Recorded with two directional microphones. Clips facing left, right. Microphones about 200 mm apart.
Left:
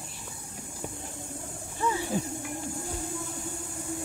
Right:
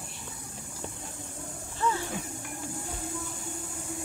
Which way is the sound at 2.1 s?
35° left (ahead or behind).